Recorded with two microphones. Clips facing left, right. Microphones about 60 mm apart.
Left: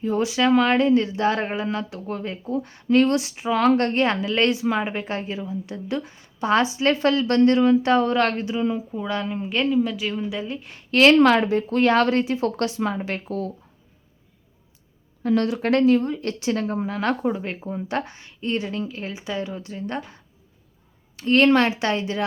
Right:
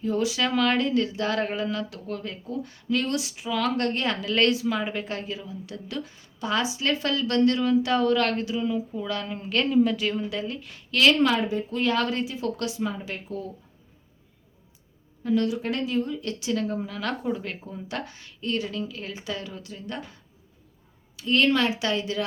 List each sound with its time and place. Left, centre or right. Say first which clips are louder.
0.0 s speech: left 4 dB; left
9.6 s speech: right 2 dB; centre
10.6 s speech: left 6 dB; left
11.2 s speech: left 6 dB; left
15.2 s speech: left 3 dB; left
19.1 s speech: left 5 dB; left
21.2 s speech: left 5 dB; left